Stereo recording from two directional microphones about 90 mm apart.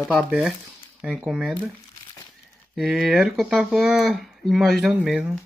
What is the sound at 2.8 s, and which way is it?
Speech, 5° right (ahead or behind).